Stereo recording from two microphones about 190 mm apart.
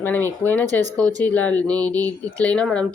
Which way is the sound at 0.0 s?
10° left (ahead or behind).